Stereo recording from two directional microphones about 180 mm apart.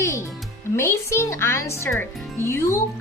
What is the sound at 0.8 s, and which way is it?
Speech, 15° left (ahead or behind).